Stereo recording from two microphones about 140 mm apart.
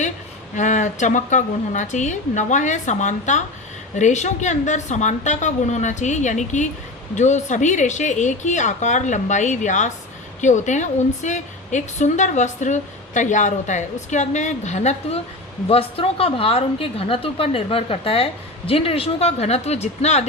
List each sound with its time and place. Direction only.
0.5 s a woman's voice: 60° left (ahead or behind)